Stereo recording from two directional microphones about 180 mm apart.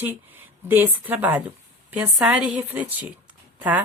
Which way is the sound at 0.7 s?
10° right (ahead or behind).